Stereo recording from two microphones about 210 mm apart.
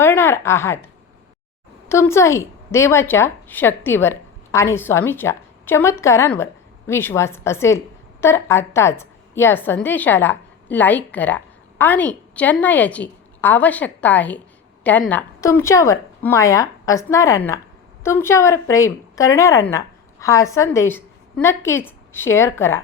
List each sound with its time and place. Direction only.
0.0 s speech: 10° left (ahead or behind)
1.9 s a woman's voice: 10° left (ahead or behind)